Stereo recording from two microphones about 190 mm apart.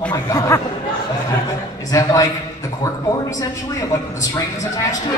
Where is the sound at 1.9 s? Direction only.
20° left (ahead or behind).